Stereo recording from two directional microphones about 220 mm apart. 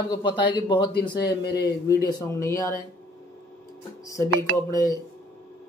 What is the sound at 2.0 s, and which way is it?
Speech, 15° left (ahead or behind).